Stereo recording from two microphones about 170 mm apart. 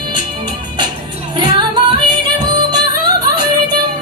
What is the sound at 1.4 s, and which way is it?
Yodeling, 25° right (ahead or behind).